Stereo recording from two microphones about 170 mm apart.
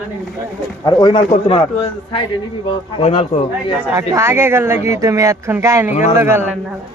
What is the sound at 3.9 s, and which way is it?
Speech, 15° right (ahead or behind).